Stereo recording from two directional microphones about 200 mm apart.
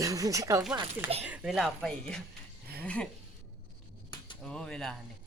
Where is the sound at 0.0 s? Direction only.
15° right (ahead or behind).